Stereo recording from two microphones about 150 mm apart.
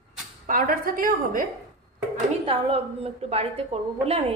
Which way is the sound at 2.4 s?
40° right (ahead or behind).